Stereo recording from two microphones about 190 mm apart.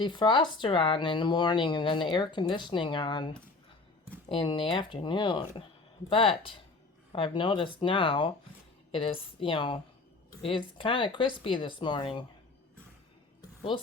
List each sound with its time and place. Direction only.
0.0 s speech: 25° left (ahead or behind)
4.4 s speech: 25° left (ahead or behind)